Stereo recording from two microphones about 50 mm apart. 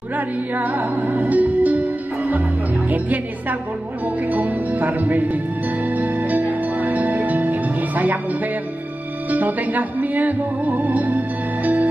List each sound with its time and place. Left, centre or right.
0.6 s music: right
2.9 s a woman's voice: right
4.3 s music: right
9.3 s music: right